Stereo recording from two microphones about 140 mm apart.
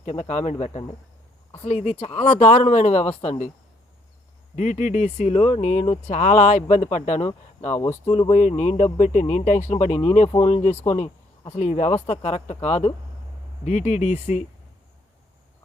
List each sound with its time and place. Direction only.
0.0 s speech: 55° left (ahead or behind)
4.5 s speech: 60° left (ahead or behind)
8.3 s speech: 60° left (ahead or behind)